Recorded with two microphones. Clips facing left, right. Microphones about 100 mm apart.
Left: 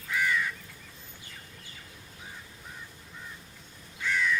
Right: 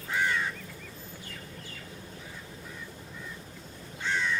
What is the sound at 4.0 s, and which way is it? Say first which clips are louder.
Crow: left 2 dB; 30° right (ahead or behind).